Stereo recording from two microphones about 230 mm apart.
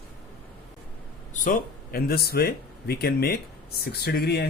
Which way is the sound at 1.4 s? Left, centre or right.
Left.